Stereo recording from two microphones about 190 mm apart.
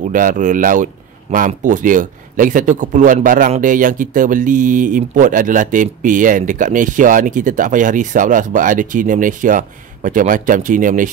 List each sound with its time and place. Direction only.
0.0 s speech: 45° right (ahead or behind)